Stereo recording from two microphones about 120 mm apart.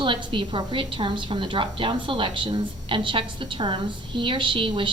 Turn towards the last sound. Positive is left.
turn(degrees=-45)  # may be behind; listen again after turning